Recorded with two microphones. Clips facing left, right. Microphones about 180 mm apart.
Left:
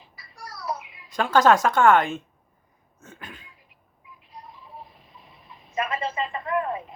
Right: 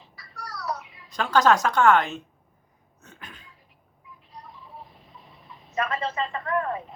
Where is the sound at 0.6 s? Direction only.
10° left (ahead or behind).